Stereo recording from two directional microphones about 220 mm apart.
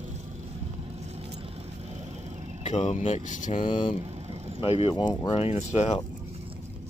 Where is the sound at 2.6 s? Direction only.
30° left (ahead or behind).